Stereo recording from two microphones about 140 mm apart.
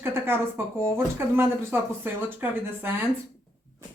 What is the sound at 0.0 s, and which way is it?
Speech, 15° right (ahead or behind).